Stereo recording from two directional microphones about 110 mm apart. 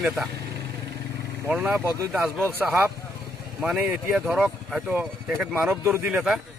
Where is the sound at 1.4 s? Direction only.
15° right (ahead or behind).